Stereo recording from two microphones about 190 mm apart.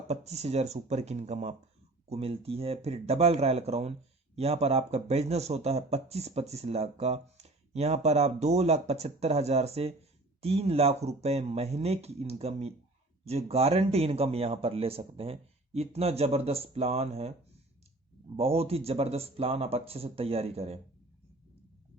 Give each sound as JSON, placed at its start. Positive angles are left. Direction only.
{"t": 0.1, "sound": "a man's voice", "side_deg": -35}
{"t": 18.3, "sound": "a man's voice", "side_deg": -30}